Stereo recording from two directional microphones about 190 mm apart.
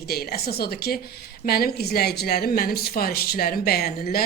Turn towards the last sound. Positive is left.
turn(degrees=55)  # may be behind; listen again after turning